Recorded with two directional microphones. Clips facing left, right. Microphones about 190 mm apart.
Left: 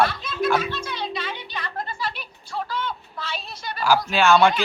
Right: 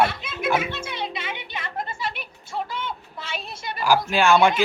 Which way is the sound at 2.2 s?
20° right (ahead or behind).